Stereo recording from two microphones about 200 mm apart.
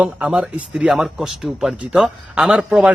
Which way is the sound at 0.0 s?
5° right (ahead or behind).